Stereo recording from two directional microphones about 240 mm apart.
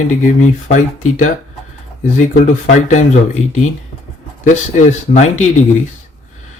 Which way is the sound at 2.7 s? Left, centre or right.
Left.